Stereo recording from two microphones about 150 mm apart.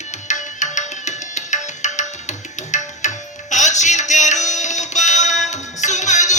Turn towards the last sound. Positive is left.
turn(degrees=50)  # may be behind; listen again after turning